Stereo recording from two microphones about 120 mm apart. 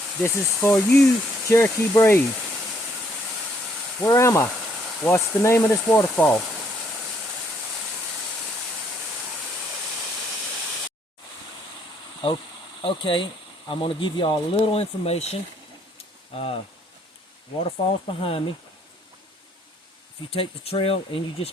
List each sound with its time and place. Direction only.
0.2 s speech: 20° left (ahead or behind)
4.0 s speech: 25° left (ahead or behind)
12.2 s speech: 45° left (ahead or behind)
17.6 s speech: 50° left (ahead or behind)
20.3 s speech: 50° left (ahead or behind)